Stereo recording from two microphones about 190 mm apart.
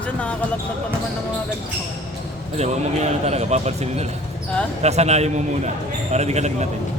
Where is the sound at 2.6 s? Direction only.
35° right (ahead or behind).